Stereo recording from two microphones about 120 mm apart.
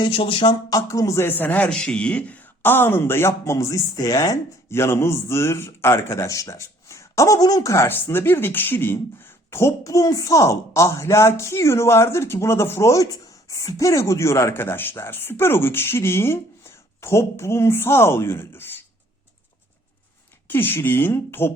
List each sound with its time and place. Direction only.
0.0 s speech: 45° left (ahead or behind)
0.7 s a man's voice: 25° left (ahead or behind)
20.5 s speech: 15° left (ahead or behind)